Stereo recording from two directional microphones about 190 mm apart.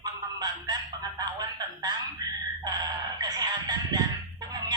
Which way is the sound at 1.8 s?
20° right (ahead or behind).